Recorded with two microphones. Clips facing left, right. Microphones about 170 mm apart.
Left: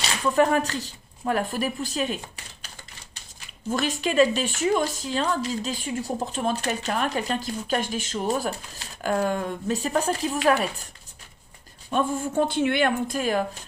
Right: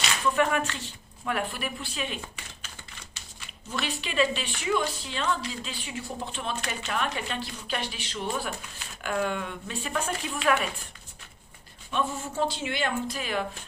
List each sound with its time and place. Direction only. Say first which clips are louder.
0.3 s a woman's voice: left 8 dB; 35° left (ahead or behind)
3.7 s a woman's voice: left 8 dB; 45° left (ahead or behind)
11.9 s a woman's voice: left 5 dB; 45° left (ahead or behind)